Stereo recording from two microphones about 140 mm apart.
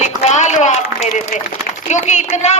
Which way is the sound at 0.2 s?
55° left (ahead or behind).